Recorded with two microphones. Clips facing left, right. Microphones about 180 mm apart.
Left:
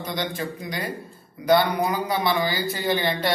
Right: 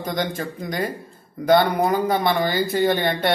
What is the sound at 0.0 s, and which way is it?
A man's voice, 50° right (ahead or behind).